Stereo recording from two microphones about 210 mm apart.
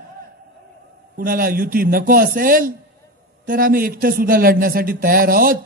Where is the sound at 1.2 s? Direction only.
45° right (ahead or behind).